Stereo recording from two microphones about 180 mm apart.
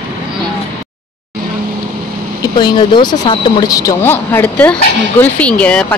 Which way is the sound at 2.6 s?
25° left (ahead or behind).